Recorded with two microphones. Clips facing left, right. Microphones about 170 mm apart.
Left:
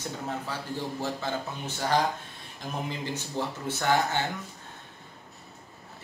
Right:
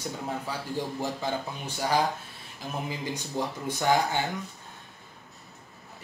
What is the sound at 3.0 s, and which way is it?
Speech, 15° right (ahead or behind).